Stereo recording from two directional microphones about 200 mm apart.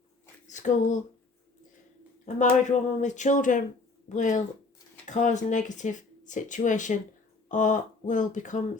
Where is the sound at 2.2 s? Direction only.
40° left (ahead or behind).